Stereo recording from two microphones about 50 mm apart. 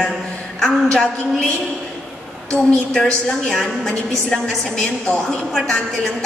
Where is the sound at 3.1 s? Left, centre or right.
Centre.